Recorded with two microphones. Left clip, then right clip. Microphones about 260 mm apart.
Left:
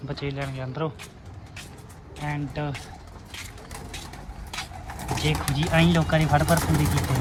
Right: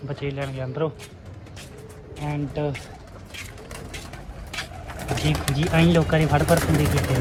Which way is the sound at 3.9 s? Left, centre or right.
Centre.